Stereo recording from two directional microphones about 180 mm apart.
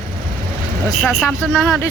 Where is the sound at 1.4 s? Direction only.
Centre (ahead or behind).